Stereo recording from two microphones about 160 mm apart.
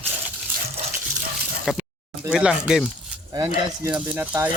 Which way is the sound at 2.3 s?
5° right (ahead or behind).